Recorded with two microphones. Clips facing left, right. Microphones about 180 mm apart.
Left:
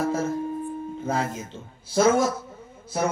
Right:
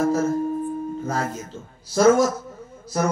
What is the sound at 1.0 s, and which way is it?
Speech, 45° right (ahead or behind).